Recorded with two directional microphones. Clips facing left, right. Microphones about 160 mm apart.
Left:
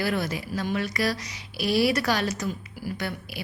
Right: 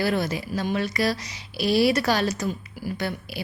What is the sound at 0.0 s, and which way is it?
A woman's voice, 30° right (ahead or behind).